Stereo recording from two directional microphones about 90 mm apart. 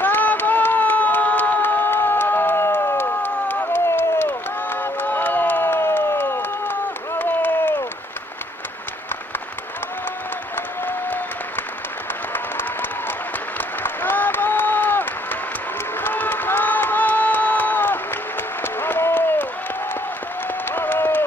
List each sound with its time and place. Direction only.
0.0 s a sound: 20° left (ahead or behind)
10.9 s applause: 20° left (ahead or behind)
13.8 s applause: 20° left (ahead or behind)
16.0 s crowd: 20° left (ahead or behind)
18.6 s applause: 25° left (ahead or behind)
20.6 s applause: 20° left (ahead or behind)